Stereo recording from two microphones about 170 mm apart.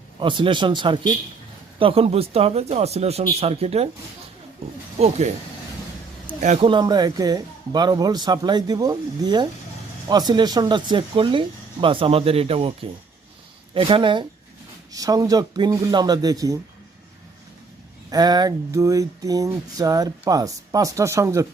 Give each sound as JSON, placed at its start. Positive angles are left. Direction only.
{"t": 0.2, "sound": "speech", "side_deg": -30}
{"t": 4.9, "sound": "speech", "side_deg": -40}
{"t": 6.4, "sound": "speech", "side_deg": -45}
{"t": 6.7, "sound": "speech", "side_deg": -25}
{"t": 13.7, "sound": "speech", "side_deg": -30}
{"t": 18.1, "sound": "speech", "side_deg": -25}